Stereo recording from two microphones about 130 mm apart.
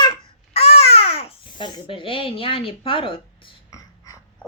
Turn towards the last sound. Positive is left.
turn(degrees=40)  # may be behind; listen again after turning